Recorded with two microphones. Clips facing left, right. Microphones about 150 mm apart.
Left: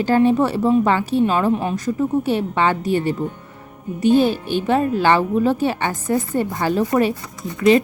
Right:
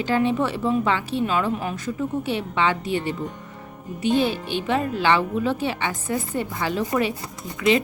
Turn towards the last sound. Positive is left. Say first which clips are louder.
# left 6 dB
turn(degrees=45)  # may be behind; listen again after turning